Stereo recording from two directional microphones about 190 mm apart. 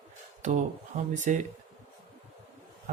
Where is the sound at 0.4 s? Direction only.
40° right (ahead or behind).